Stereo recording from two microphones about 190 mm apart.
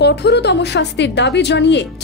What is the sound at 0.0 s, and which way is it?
A woman's voice, 60° left (ahead or behind).